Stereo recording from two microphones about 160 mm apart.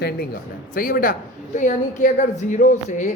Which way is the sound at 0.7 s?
60° left (ahead or behind).